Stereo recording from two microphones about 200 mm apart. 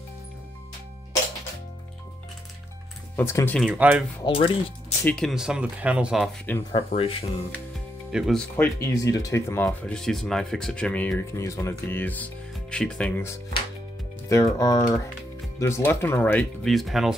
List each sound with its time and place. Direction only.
3.2 s speech: 10° left (ahead or behind); by 4.0 s 5° right (ahead or behind)
4.2 s speech: 25° left (ahead or behind)
5.0 s speech: 5° left (ahead or behind)
6.7 s speech: 30° left (ahead or behind)
8.1 s speech: centre (ahead or behind)
14.3 s speech: 15° left (ahead or behind); by 17.1 s centre (ahead or behind)